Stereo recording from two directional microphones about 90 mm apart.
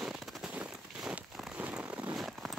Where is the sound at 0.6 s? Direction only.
15° right (ahead or behind).